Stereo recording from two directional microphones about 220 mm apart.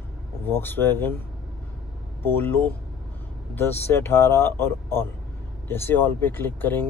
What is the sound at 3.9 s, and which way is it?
Speech, 10° left (ahead or behind).